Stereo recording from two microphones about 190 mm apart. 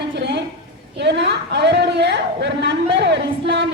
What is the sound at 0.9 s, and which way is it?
Speech, 65° right (ahead or behind).